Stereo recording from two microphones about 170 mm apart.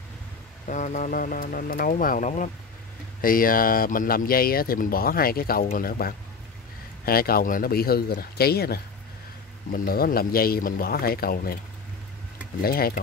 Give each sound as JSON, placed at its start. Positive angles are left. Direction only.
{"t": 0.7, "sound": "speech", "side_deg": 45}
{"t": 9.7, "sound": "speech", "side_deg": 55}
{"t": 12.6, "sound": "speech", "side_deg": 60}